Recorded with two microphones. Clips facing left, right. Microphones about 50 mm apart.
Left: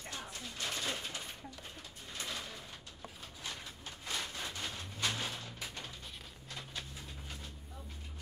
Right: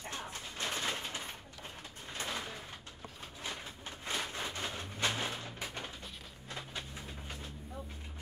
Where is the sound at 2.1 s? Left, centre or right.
Right.